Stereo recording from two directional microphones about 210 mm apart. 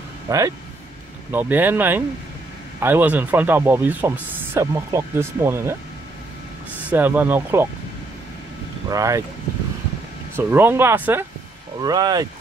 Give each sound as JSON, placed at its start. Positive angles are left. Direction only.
{"t": 0.3, "sound": "speech", "side_deg": -15}
{"t": 6.9, "sound": "speech", "side_deg": -10}
{"t": 8.9, "sound": "speech", "side_deg": -15}
{"t": 10.3, "sound": "speech", "side_deg": -10}